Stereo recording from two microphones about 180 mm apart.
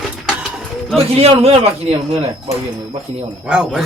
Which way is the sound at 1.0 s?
35° right (ahead or behind).